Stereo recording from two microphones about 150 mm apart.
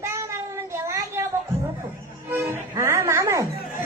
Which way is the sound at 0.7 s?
20° right (ahead or behind).